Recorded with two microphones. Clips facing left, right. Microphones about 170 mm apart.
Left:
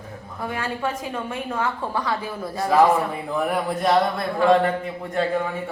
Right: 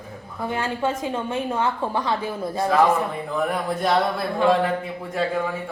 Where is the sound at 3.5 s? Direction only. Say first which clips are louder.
Left 3 dB; centre (ahead or behind).